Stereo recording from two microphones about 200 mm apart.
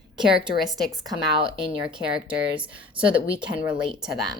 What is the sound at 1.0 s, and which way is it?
Speech, 25° right (ahead or behind).